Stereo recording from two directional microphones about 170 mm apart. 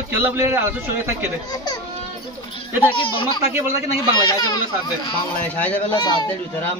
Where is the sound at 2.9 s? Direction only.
30° left (ahead or behind).